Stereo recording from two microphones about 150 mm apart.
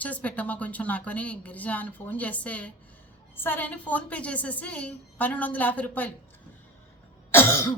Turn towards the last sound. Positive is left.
turn(degrees=15)  # may be behind; listen again after turning